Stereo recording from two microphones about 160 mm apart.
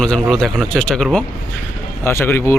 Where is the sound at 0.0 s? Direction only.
5° left (ahead or behind).